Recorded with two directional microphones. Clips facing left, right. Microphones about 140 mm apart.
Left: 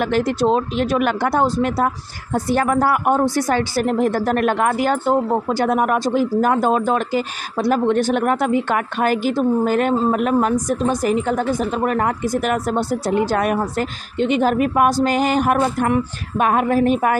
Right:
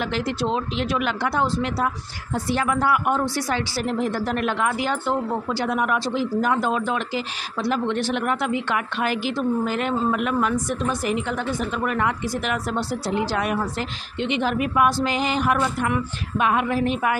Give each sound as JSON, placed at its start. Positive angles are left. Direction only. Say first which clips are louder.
{"t": 0.0, "sound": "a woman's voice", "louder": "left 7 dB", "side_deg": 50}